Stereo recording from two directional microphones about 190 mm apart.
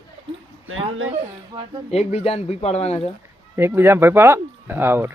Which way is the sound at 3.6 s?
10° right (ahead or behind).